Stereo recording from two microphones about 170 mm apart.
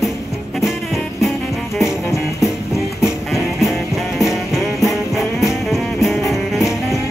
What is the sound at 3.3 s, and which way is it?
Music, centre (ahead or behind).